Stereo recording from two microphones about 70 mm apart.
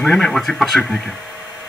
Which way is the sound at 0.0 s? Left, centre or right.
Centre.